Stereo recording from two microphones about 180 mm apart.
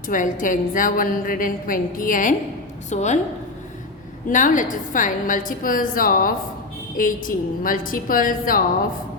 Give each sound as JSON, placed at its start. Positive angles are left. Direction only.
{"t": 0.1, "sound": "a woman's voice", "side_deg": 45}
{"t": 4.3, "sound": "a woman's voice", "side_deg": 45}